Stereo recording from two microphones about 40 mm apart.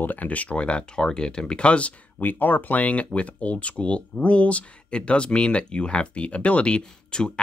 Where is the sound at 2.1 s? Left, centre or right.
Left.